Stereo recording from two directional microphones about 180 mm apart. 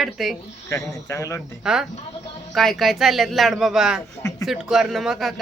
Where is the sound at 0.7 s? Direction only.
15° left (ahead or behind).